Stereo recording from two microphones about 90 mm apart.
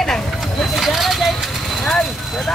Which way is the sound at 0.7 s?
Centre (ahead or behind).